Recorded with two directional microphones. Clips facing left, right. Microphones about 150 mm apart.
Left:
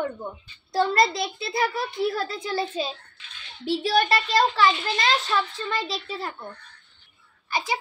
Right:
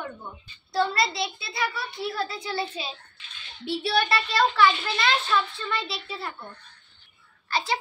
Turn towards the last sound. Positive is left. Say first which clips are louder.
# even
turn(degrees=15)  # may be behind; listen again after turning